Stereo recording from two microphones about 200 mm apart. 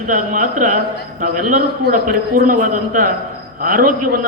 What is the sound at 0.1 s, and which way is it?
A man's voice, 40° right (ahead or behind).